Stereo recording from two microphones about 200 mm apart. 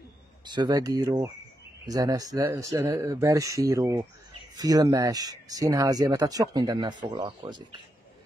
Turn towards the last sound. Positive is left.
turn(degrees=-20)  # may be behind; listen again after turning